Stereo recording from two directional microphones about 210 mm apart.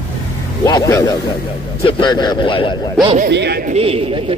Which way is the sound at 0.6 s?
15° left (ahead or behind).